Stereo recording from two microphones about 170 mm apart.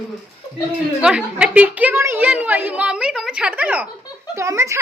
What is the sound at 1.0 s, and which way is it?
A woman's voice, 5° right (ahead or behind).